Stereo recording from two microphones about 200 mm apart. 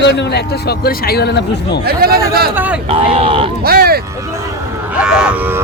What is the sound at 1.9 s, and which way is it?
Speech, 50° right (ahead or behind).